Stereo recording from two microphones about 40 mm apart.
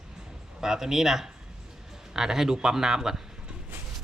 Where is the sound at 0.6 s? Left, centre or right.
Centre.